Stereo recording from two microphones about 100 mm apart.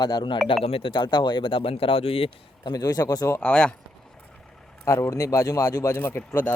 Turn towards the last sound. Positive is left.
turn(degrees=20)  # may be behind; listen again after turning